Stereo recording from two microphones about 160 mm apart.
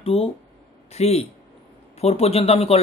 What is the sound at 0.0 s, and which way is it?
Speech, 35° left (ahead or behind).